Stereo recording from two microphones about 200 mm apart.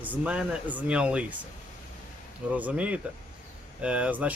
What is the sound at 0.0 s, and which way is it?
Speech, 5° right (ahead or behind).